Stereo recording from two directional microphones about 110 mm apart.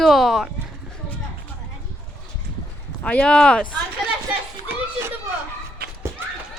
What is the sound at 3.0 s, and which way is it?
Speech, 10° left (ahead or behind).